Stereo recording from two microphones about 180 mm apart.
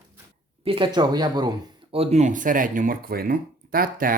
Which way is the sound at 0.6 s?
30° right (ahead or behind).